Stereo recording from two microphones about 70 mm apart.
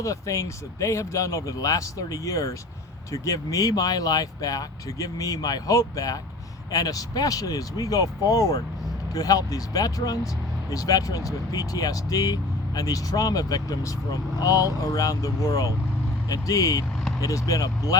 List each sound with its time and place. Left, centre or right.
0.0 s speech: left